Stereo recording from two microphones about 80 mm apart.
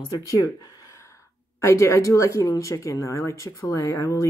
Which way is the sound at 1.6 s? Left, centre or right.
Left.